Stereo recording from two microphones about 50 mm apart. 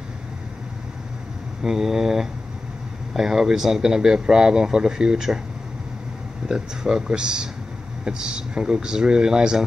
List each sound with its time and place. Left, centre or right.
1.6 s speech: centre
6.5 s speech: centre